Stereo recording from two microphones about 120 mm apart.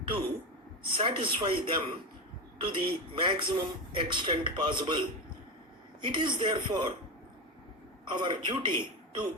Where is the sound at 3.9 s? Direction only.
40° right (ahead or behind).